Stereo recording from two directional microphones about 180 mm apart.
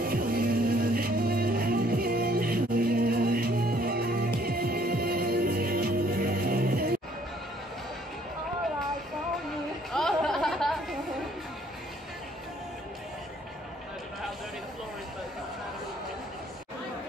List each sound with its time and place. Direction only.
0.1 s music: 55° right (ahead or behind)
9.9 s chatter: centre (ahead or behind)